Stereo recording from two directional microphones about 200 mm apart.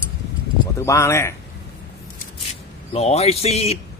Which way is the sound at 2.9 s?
30° left (ahead or behind).